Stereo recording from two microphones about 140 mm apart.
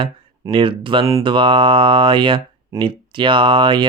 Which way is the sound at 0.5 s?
40° right (ahead or behind).